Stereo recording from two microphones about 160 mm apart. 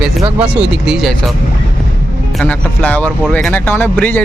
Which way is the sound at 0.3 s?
5° right (ahead or behind).